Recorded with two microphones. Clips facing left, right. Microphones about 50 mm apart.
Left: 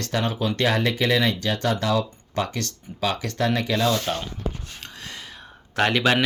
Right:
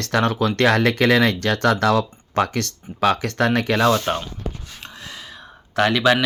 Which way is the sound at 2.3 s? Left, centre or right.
Right.